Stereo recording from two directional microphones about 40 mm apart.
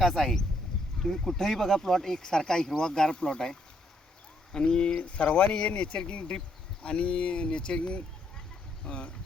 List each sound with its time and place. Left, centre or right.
0.0 s speech: centre; by 9.1 s left